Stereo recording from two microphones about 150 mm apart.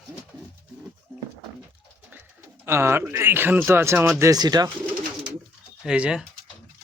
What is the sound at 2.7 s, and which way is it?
Speech, 15° right (ahead or behind).